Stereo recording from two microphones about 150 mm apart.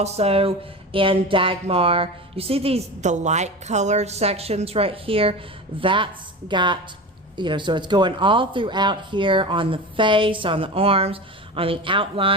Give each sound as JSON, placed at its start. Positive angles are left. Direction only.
{"t": 0.0, "sound": "speech", "side_deg": -45}